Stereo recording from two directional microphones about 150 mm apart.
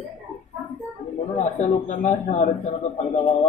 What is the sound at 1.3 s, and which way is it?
A man's voice, 50° left (ahead or behind).